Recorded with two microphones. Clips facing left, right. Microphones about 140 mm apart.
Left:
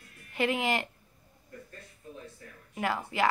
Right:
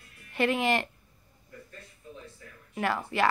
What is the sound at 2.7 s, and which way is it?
Speech, 15° left (ahead or behind).